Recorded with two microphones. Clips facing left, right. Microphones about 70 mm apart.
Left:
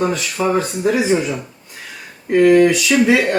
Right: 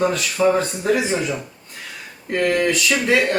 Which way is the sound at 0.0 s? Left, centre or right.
Centre.